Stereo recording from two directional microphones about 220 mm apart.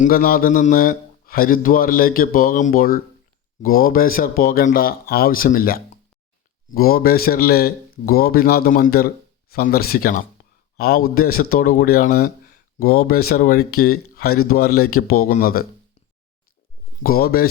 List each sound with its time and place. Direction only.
0.0 s a man's voice: 40° left (ahead or behind)
17.0 s speech: 45° left (ahead or behind)